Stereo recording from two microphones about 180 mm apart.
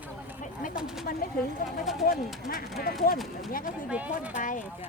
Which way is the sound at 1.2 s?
55° left (ahead or behind).